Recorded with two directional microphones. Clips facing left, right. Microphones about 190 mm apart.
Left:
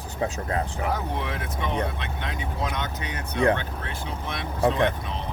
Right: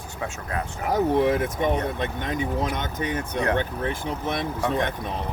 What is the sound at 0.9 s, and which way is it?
Speech, 45° right (ahead or behind).